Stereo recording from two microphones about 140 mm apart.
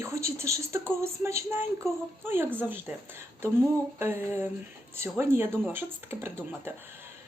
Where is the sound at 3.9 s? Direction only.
15° right (ahead or behind).